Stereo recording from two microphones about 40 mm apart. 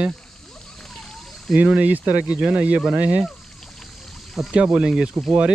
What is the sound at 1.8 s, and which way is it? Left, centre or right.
A man's voice, right.